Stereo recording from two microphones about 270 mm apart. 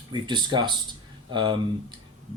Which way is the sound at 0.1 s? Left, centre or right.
Centre.